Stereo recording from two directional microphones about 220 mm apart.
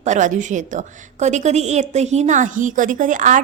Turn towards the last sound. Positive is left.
turn(degrees=-35)  # may be behind; listen again after turning